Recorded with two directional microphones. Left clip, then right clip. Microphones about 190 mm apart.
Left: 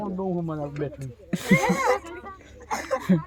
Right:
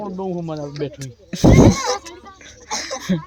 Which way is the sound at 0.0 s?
50° right (ahead or behind).